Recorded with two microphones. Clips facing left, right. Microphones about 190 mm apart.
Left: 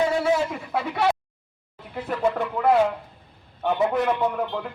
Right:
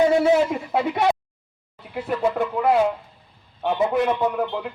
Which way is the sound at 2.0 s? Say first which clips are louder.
Right 2 dB; 5° right (ahead or behind).